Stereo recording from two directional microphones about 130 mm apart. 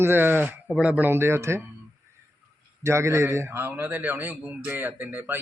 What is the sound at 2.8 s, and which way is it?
A man's voice, 20° right (ahead or behind).